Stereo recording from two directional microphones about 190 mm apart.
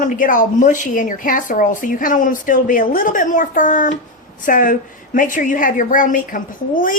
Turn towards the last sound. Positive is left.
turn(degrees=45)  # may be behind; listen again after turning